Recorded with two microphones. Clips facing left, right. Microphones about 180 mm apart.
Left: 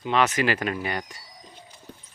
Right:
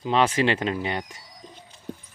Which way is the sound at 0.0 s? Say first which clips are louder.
Right 1 dB; 30° right (ahead or behind).